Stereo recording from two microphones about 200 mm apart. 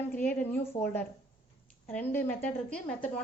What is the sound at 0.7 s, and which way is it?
A woman's voice, 10° left (ahead or behind).